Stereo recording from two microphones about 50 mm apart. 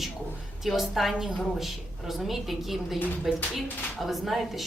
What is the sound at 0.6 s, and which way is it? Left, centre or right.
A woman's voice, centre.